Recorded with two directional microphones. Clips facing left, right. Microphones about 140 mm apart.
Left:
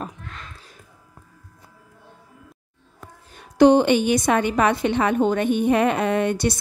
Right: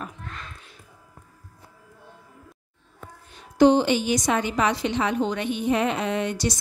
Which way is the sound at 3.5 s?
60° left (ahead or behind).